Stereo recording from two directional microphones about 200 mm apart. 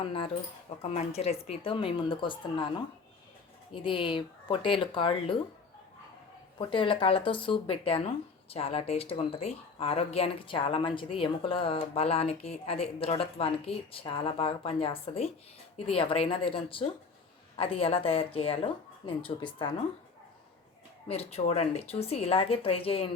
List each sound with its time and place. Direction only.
0.0 s speech: 25° left (ahead or behind)
6.6 s speech: 25° left (ahead or behind)
21.1 s speech: 30° left (ahead or behind)